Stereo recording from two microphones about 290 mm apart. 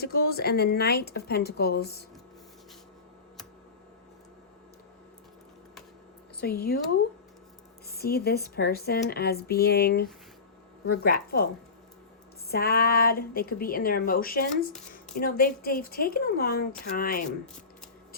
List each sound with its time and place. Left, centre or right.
0.0 s speech: left
6.4 s speech: left
7.9 s speech: left
12.5 s speech: left